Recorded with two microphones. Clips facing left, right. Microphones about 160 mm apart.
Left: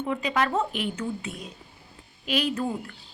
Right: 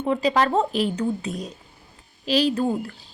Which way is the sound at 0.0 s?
35° right (ahead or behind).